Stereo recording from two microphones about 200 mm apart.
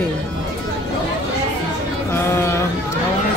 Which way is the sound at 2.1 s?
10° left (ahead or behind).